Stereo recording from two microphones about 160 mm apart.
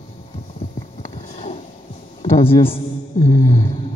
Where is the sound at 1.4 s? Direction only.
40° left (ahead or behind).